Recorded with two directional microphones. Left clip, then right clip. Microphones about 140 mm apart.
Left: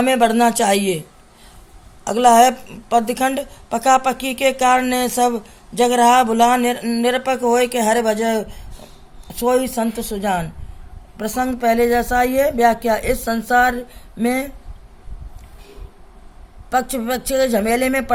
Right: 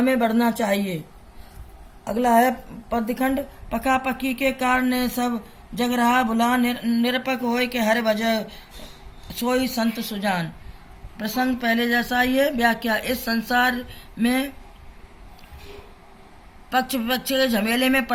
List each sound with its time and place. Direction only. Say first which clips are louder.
0.0 s a woman's voice: left 6 dB; 35° left (ahead or behind)
2.0 s a woman's voice: left 7 dB; 35° left (ahead or behind); by 14.4 s 55° left (ahead or behind)
16.6 s a man's voice: left 3 dB; 55° left (ahead or behind)